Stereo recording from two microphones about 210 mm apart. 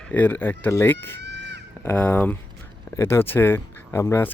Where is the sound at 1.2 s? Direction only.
55° right (ahead or behind).